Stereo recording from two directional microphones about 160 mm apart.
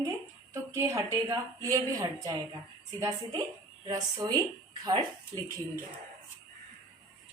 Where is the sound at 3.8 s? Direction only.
25° right (ahead or behind).